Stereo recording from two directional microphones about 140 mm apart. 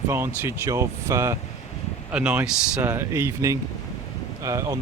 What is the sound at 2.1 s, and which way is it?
Speech, 10° right (ahead or behind).